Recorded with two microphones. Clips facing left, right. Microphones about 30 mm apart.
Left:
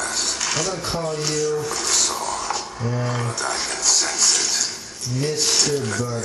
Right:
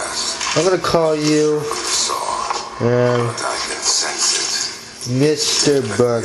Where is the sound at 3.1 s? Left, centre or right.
Right.